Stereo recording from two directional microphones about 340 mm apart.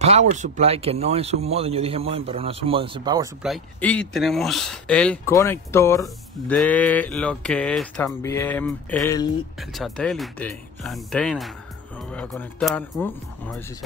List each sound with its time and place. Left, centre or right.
0.0 s speech: centre
3.4 s speech: centre